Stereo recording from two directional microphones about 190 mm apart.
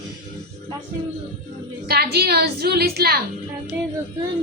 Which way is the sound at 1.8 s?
55° right (ahead or behind).